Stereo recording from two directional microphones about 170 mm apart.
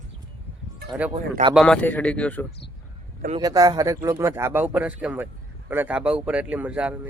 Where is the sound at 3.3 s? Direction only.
20° right (ahead or behind).